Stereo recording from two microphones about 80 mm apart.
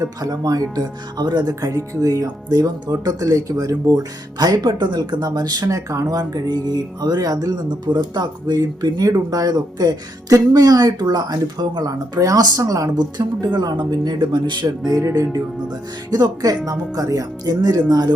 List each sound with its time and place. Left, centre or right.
0.0 s speech: right
1.6 s speech: right
2.2 s speech: right
14.9 s speech: right
16.0 s speech: right